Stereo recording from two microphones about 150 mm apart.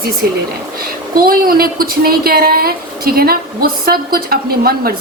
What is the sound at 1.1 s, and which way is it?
A woman's voice, 75° right (ahead or behind).